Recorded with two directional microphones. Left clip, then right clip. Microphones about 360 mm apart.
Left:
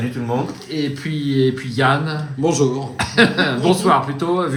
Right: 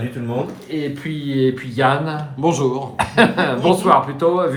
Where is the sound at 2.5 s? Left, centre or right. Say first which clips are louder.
Even; right.